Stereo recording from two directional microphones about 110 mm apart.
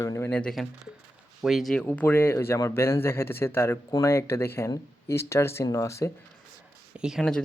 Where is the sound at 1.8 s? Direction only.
20° left (ahead or behind).